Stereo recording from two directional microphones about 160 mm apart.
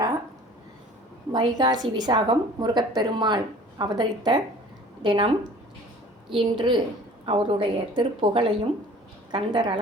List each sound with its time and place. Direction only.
1.3 s a woman's voice: 25° right (ahead or behind)
6.3 s a woman's voice: 30° right (ahead or behind)